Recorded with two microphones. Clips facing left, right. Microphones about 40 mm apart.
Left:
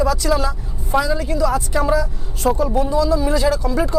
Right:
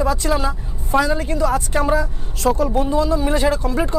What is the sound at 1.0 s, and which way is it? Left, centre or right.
Speech, right.